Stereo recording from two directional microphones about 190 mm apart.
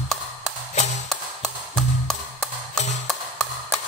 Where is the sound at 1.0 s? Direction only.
Centre (ahead or behind).